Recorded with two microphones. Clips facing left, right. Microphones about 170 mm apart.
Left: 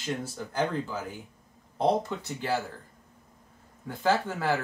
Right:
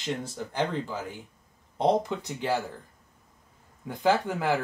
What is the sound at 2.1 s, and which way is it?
Speech, 15° right (ahead or behind).